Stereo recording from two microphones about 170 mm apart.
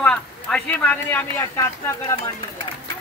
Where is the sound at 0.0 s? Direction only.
5° left (ahead or behind).